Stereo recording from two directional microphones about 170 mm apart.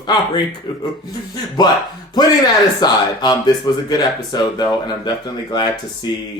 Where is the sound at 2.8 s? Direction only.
25° left (ahead or behind).